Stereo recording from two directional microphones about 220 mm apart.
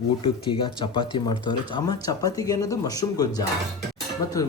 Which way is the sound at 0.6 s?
20° left (ahead or behind).